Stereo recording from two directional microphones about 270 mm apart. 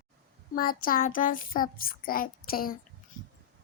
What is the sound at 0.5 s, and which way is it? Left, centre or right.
A child's voice, left.